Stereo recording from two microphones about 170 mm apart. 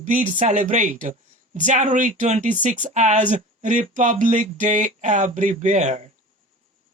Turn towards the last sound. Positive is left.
turn(degrees=-40)  # may be behind; listen again after turning